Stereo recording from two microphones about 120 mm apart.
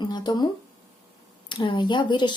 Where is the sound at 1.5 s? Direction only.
45° left (ahead or behind).